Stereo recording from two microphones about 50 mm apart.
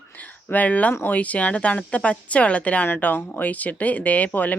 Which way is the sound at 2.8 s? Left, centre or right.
Left.